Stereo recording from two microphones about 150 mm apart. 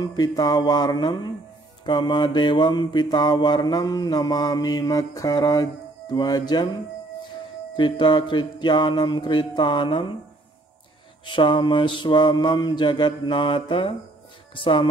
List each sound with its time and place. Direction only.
0.0 s mantra: 25° left (ahead or behind)
7.7 s mantra: 30° left (ahead or behind)
11.2 s mantra: 35° left (ahead or behind)
14.5 s speech: 35° left (ahead or behind)